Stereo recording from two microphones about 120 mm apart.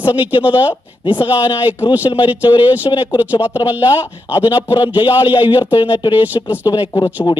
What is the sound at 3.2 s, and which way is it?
Speech, 15° right (ahead or behind).